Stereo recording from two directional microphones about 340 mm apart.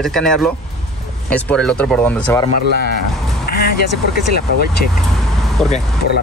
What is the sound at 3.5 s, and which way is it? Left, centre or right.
Vehicle, left.